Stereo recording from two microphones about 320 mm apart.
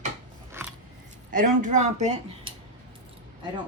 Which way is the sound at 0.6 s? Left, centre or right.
Centre.